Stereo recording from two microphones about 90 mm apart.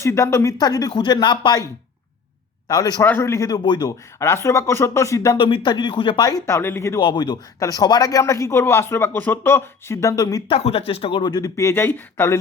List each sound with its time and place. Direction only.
0.0 s speech: 30° left (ahead or behind)
0.6 s speech: 45° left (ahead or behind)
2.6 s speech: 45° left (ahead or behind)
3.0 s speech: 25° left (ahead or behind)
3.6 s speech: 60° left (ahead or behind)
3.8 s speech: 30° left (ahead or behind)
5.4 s speech: 70° left (ahead or behind)
6.4 s speech: 30° left (ahead or behind)
7.0 s speech: 55° left (ahead or behind)
7.6 s speech: 45° left (ahead or behind)
10.5 s speech: 90° left
11.3 s speech: 45° left (ahead or behind); by 12.4 s 25° left (ahead or behind)